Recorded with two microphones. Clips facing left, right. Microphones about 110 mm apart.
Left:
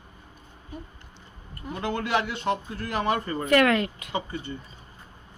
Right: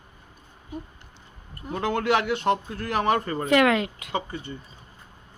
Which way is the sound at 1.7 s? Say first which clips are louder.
Right 3 dB; 65° right (ahead or behind).